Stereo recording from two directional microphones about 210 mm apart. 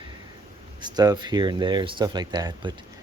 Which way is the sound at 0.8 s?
20° right (ahead or behind).